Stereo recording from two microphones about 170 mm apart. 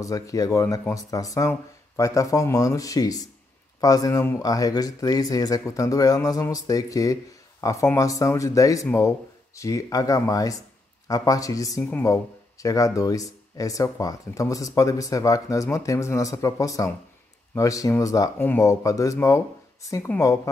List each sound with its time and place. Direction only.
0.0 s speech: 20° left (ahead or behind)